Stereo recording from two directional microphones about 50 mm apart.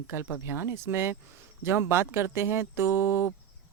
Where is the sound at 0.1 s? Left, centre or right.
Right.